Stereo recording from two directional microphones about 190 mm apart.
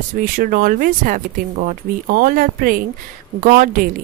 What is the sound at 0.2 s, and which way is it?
Speech, 50° right (ahead or behind).